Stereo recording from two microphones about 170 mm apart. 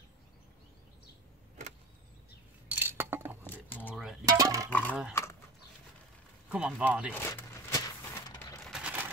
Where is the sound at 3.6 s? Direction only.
10° left (ahead or behind).